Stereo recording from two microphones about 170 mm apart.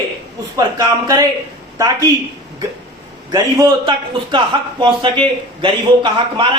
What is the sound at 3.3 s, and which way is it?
A man's voice, 20° right (ahead or behind).